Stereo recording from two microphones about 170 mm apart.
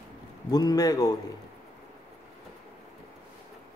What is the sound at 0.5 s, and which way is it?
Speech, 20° left (ahead or behind).